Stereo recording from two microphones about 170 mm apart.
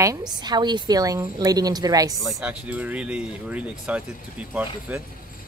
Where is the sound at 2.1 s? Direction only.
5° right (ahead or behind).